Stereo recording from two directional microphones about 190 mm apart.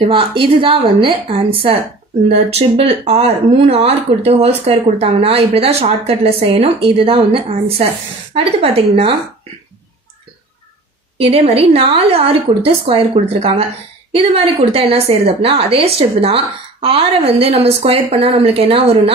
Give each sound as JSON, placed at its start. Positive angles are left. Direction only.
{"t": 0.0, "sound": "a woman's voice", "side_deg": -25}
{"t": 11.1, "sound": "a woman's voice", "side_deg": -30}